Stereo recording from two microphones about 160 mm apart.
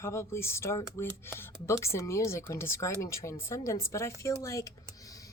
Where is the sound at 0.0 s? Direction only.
15° left (ahead or behind).